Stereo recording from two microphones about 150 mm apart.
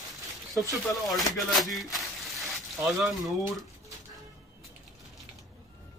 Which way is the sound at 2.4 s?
Centre (ahead or behind).